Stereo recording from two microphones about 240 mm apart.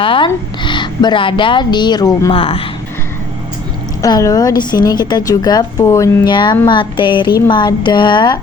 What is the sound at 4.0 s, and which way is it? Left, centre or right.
A woman's voice, centre.